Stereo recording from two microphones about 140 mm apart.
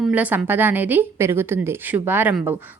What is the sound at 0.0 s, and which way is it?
A woman's voice, 10° right (ahead or behind).